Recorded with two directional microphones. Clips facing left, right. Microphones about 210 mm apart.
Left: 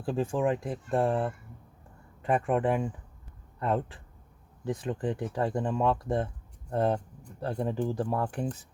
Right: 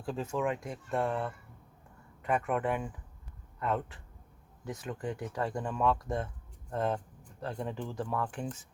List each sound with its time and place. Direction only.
0.0 s a man's voice: 30° left (ahead or behind)